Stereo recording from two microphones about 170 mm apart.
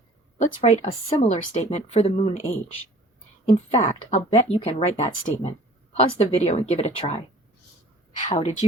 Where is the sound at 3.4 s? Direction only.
40° left (ahead or behind).